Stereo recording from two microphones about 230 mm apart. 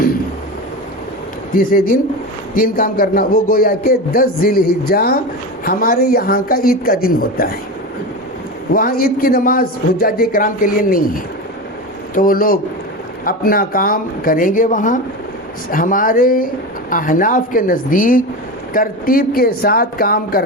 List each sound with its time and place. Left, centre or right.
1.5 s a man's voice: left
8.7 s a man's voice: left